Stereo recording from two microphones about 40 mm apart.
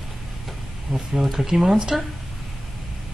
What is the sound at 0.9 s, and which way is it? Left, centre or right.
Speech, centre.